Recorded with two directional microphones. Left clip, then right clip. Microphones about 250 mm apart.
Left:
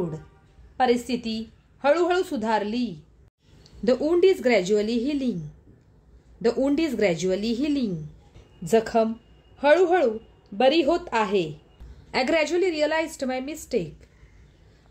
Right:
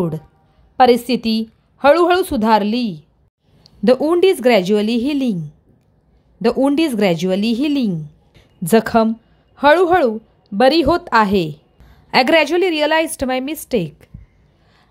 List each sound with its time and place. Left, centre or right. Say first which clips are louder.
0.7 s a woman's voice: right 10 dB; right
6.4 s a woman's voice: right 7 dB; right